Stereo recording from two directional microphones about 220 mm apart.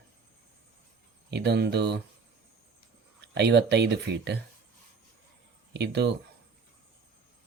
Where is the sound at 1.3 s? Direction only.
50° right (ahead or behind).